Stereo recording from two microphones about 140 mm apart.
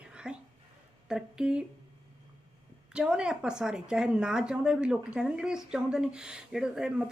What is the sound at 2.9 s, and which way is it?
A woman's voice, 5° right (ahead or behind).